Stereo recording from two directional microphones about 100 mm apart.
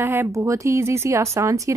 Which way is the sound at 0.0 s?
25° right (ahead or behind).